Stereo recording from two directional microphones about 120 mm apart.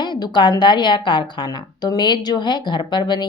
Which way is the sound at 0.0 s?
40° left (ahead or behind).